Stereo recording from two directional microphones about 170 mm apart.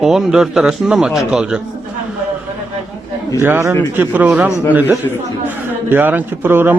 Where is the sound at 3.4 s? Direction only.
15° right (ahead or behind).